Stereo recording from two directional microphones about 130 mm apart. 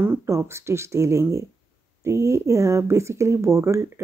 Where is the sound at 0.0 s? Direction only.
20° right (ahead or behind).